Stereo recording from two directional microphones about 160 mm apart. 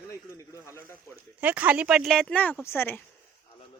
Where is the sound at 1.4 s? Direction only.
10° right (ahead or behind); by 3.0 s 15° left (ahead or behind).